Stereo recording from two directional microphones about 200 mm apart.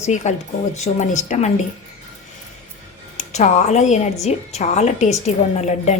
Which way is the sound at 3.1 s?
35° left (ahead or behind).